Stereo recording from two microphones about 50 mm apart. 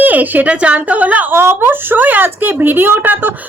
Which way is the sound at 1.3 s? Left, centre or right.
Right.